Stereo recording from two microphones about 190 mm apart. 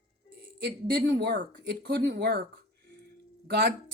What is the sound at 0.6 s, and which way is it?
Speech, 55° right (ahead or behind).